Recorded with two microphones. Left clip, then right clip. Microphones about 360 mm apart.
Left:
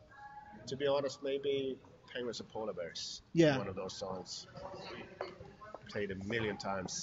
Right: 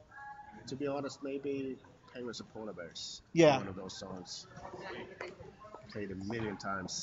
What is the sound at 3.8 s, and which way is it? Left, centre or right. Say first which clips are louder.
Speech: left 3 dB; centre.